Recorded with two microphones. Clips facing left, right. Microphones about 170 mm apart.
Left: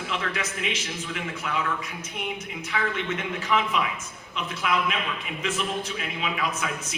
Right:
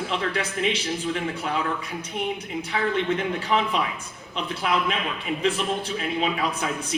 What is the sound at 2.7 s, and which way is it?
A man's voice, 30° right (ahead or behind).